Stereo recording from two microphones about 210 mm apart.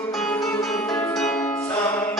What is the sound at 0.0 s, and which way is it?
Music, 5° left (ahead or behind).